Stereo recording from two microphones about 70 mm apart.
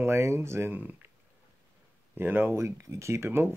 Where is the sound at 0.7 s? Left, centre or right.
Right.